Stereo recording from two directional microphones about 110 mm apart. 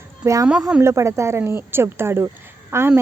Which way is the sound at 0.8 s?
25° right (ahead or behind).